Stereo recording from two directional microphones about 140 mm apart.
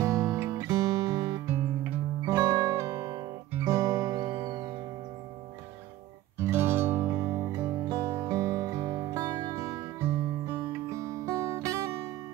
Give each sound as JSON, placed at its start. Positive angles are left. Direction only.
{"t": 0.0, "sound": "music", "side_deg": -20}
{"t": 6.4, "sound": "music", "side_deg": -15}